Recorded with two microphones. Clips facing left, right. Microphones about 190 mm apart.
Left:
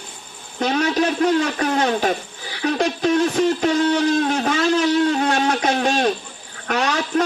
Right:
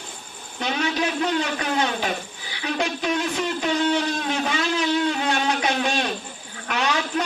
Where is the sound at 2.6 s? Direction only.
45° left (ahead or behind).